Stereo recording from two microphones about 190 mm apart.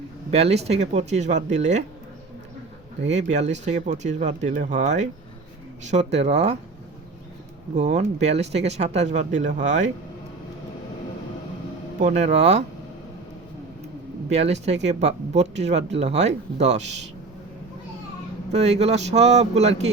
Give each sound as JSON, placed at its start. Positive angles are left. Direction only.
{"t": 0.3, "sound": "speech", "side_deg": -35}
{"t": 3.1, "sound": "speech", "side_deg": -35}
{"t": 7.8, "sound": "speech", "side_deg": -35}
{"t": 11.9, "sound": "speech", "side_deg": -40}
{"t": 14.3, "sound": "speech", "side_deg": -35}
{"t": 18.5, "sound": "speech", "side_deg": -35}